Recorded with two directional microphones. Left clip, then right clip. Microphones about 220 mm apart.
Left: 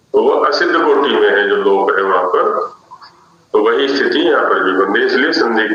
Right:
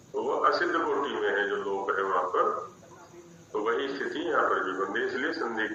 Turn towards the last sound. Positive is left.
turn(degrees=50)  # may be behind; listen again after turning